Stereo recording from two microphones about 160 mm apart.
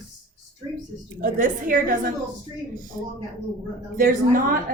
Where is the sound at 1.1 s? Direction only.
60° right (ahead or behind).